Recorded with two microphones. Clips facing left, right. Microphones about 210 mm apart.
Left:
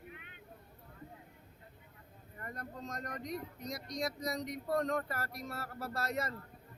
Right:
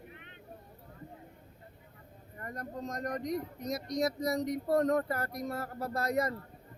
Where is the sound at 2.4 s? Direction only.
40° right (ahead or behind).